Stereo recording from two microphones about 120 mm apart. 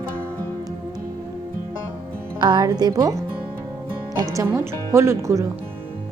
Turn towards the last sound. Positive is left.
turn(degrees=-25)  # may be behind; listen again after turning